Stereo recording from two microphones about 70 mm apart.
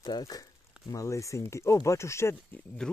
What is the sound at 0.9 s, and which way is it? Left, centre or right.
Speech, left.